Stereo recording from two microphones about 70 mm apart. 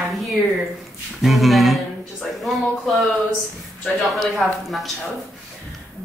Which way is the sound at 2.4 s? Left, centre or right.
Centre.